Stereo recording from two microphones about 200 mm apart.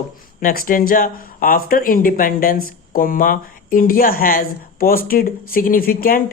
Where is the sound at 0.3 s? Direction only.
45° left (ahead or behind).